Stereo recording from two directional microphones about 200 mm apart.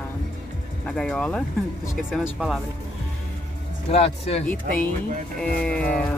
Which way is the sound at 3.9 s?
30° left (ahead or behind).